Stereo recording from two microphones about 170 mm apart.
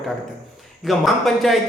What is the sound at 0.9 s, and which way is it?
Speech, centre (ahead or behind).